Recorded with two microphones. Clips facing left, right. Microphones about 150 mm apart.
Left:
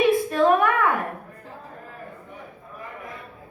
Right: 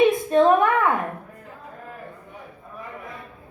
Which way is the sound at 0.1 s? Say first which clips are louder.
Right 2 dB; 20° right (ahead or behind).